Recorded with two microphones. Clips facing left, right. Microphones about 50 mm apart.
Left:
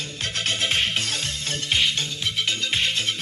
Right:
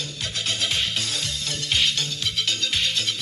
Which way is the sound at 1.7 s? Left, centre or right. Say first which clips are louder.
Left 1 dB; centre.